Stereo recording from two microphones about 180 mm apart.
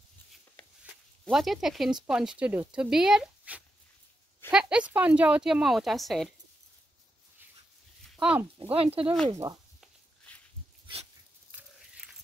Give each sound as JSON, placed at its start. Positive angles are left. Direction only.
{"t": 1.2, "sound": "speech", "side_deg": 0}
{"t": 8.2, "sound": "speech", "side_deg": -5}
{"t": 8.7, "sound": "speech", "side_deg": -30}
{"t": 9.3, "sound": "speech", "side_deg": -15}
{"t": 9.8, "sound": "a sound", "side_deg": 10}
{"t": 11.5, "sound": "a sound", "side_deg": -5}